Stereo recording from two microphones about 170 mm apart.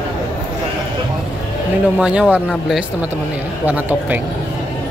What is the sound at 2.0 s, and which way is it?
Speech, 5° right (ahead or behind).